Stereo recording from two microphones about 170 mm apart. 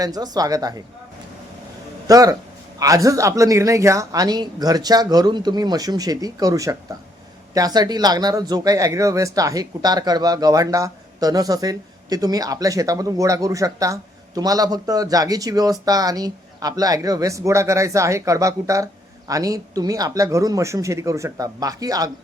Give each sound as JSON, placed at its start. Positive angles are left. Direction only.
{"t": 0.0, "sound": "speech", "side_deg": -20}
{"t": 2.0, "sound": "speech", "side_deg": -20}